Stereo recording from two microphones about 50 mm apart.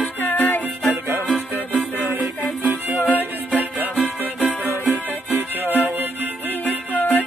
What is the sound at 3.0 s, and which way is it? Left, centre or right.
Music, left.